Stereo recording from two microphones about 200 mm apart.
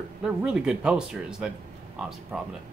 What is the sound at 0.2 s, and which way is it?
Speech, 5° right (ahead or behind).